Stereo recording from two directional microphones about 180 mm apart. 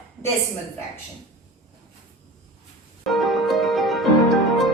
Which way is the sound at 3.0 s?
Centre (ahead or behind).